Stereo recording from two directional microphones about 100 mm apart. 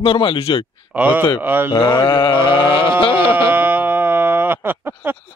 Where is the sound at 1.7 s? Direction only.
45° left (ahead or behind).